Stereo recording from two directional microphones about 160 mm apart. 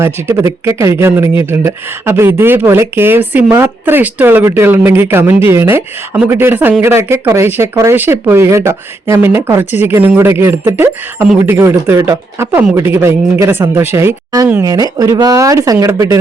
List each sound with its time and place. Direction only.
0.0 s speech: 15° right (ahead or behind)